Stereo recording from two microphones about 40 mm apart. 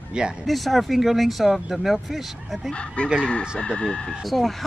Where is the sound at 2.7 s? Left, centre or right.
Left.